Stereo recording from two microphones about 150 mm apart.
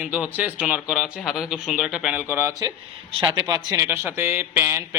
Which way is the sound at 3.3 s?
25° right (ahead or behind).